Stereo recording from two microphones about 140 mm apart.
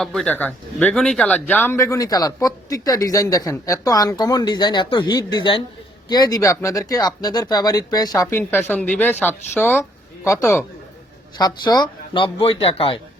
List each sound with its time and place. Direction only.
0.0 s a man's voice: 5° left (ahead or behind); by 13.0 s 40° left (ahead or behind)